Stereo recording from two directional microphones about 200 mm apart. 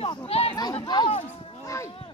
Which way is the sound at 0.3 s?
30° left (ahead or behind).